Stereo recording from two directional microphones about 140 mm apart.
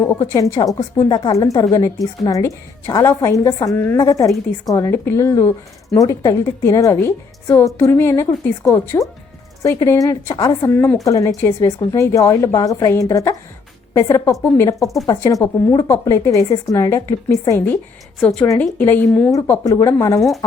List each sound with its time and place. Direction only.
0.0 s a woman's voice: 20° left (ahead or behind)
3.7 s a woman's voice: 10° left (ahead or behind)
3.9 s a woman's voice: 20° left (ahead or behind)
18.2 s a woman's voice: 5° left (ahead or behind)
19.3 s a woman's voice: 20° left (ahead or behind)